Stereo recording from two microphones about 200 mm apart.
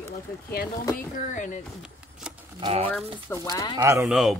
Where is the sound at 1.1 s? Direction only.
40° left (ahead or behind).